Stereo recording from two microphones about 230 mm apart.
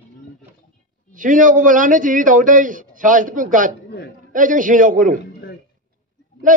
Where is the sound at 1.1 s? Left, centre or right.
Right.